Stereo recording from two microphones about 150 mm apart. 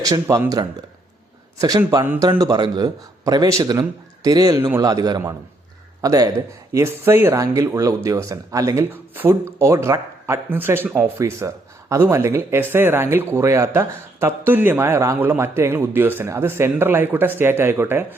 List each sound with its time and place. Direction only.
0.0 s a man's voice: 25° right (ahead or behind)